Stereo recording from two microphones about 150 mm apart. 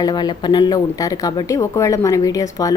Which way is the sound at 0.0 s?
30° left (ahead or behind).